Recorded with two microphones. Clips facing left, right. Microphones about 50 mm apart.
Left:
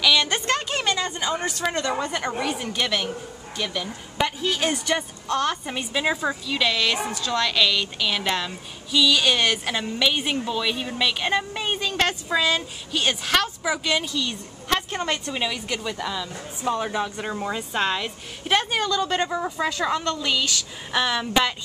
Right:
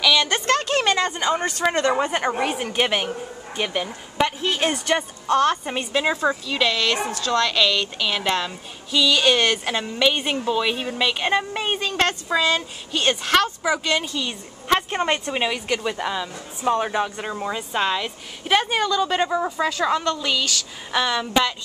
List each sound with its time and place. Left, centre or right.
0.0 s a sound: centre
0.3 s a woman's voice: centre
0.8 s speech: right
1.7 s a woman's voice: right
5.9 s speech: centre
11.9 s speech: centre
14.0 s a woman's voice: centre
17.3 s speech: centre
19.6 s a woman's voice: centre